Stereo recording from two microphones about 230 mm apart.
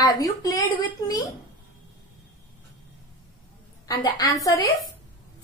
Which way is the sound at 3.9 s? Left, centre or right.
Centre.